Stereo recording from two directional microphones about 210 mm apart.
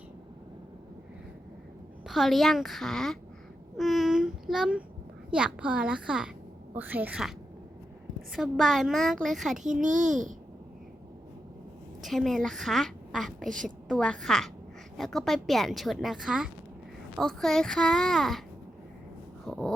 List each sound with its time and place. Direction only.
2.0 s a child's voice: centre (ahead or behind)
9.8 s a child's voice: 35° right (ahead or behind)
12.0 s a child's voice: centre (ahead or behind)
13.5 s a child's voice: 40° right (ahead or behind)
13.8 s a child's voice: 5° left (ahead or behind)
19.5 s a child's voice: centre (ahead or behind)